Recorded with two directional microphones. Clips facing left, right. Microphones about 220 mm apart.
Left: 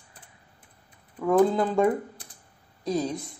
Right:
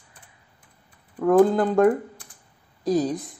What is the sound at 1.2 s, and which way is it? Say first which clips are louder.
A woman's voice: right 4 dB; 5° right (ahead or behind).